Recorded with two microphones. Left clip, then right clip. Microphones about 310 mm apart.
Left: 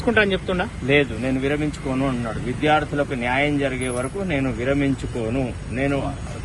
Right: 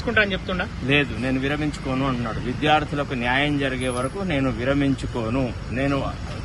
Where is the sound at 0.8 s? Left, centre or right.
Centre.